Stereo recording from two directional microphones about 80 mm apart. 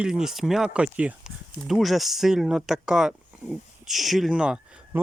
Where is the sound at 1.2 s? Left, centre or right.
Centre.